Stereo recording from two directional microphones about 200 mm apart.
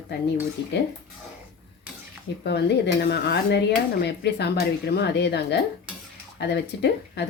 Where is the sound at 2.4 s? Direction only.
55° left (ahead or behind).